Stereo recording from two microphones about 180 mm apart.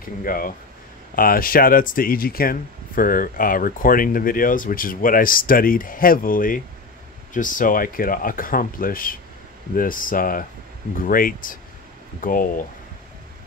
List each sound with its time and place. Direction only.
0.0 s speech: 50° left (ahead or behind)